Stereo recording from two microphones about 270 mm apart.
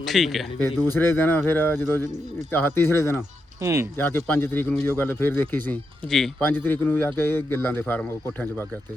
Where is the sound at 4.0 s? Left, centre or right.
Centre.